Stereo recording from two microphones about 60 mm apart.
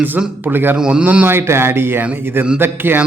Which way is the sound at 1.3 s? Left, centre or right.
Right.